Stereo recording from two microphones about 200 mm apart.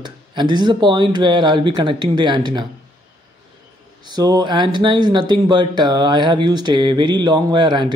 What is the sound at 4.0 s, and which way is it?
Speech, 20° right (ahead or behind).